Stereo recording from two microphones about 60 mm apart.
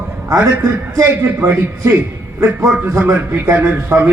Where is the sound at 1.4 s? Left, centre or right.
Right.